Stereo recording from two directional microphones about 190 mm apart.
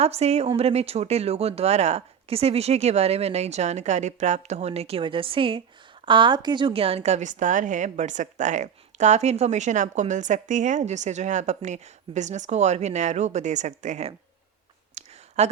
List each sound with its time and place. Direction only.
0.0 s a woman's voice: 35° right (ahead or behind)
15.0 s a sound: 35° right (ahead or behind)
15.4 s a woman's voice: 35° right (ahead or behind)